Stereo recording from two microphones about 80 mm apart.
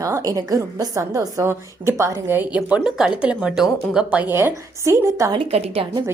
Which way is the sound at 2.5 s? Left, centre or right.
Centre.